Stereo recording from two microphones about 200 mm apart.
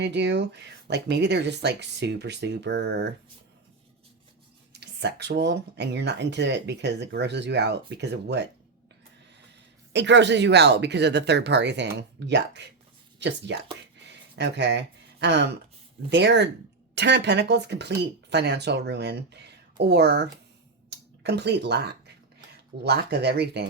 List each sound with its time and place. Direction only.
0.0 s speech: 60° right (ahead or behind)
4.7 s speech: 60° right (ahead or behind)
9.9 s speech: 60° right (ahead or behind)
14.1 s a sound: 60° right (ahead or behind)
16.0 s speech: 60° right (ahead or behind)
21.2 s speech: 55° right (ahead or behind)